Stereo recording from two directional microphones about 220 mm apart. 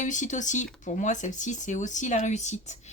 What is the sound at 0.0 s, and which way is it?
A woman's voice, 35° left (ahead or behind).